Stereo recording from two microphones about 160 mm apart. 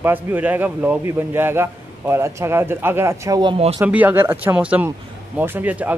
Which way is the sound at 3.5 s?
35° right (ahead or behind).